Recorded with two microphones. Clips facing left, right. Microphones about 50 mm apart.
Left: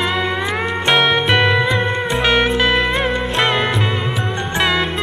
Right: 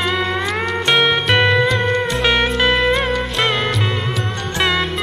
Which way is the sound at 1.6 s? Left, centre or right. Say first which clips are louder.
Right 1 dB; centre.